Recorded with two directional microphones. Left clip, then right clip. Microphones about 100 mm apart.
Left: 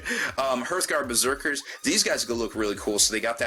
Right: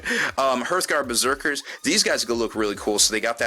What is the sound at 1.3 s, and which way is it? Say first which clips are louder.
Speech: right 3 dB; 35° right (ahead or behind).